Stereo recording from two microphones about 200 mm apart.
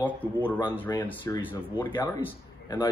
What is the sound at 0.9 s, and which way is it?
Speech, 20° left (ahead or behind).